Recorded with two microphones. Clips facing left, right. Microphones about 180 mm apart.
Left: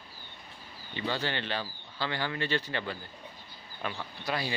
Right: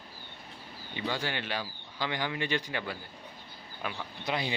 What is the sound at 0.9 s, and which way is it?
Speech, 10° right (ahead or behind).